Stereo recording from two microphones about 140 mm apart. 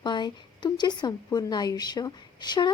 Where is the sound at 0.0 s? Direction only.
30° left (ahead or behind).